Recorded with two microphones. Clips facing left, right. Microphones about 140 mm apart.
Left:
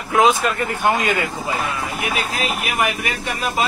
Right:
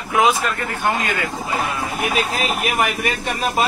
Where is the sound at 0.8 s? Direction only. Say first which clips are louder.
Left 2 dB; 15° left (ahead or behind).